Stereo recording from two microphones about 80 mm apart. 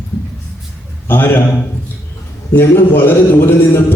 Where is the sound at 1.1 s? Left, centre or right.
Left.